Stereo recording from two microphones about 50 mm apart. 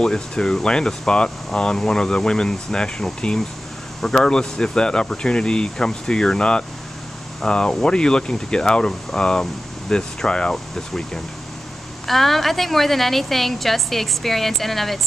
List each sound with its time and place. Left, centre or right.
0.0 s speech: centre